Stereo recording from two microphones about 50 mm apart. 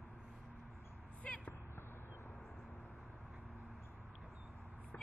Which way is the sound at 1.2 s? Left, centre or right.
Left.